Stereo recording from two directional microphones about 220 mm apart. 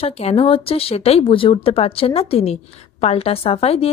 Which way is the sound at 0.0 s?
30° left (ahead or behind).